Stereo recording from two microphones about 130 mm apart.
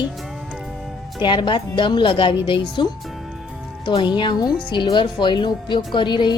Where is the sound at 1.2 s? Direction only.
40° left (ahead or behind).